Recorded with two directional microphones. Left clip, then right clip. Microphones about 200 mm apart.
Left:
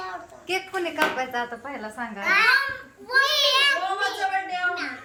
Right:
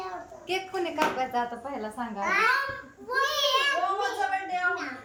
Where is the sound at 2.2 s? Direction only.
15° right (ahead or behind).